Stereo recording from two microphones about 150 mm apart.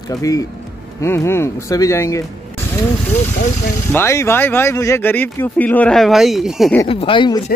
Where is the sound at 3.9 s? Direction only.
15° left (ahead or behind); by 6.7 s centre (ahead or behind).